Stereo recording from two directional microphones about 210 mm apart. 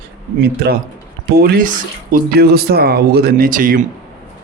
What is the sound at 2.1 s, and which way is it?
Speech, 45° right (ahead or behind).